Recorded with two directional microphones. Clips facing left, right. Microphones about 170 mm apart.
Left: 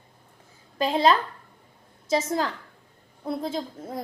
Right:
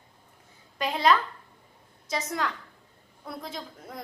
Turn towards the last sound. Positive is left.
turn(degrees=25)  # may be behind; listen again after turning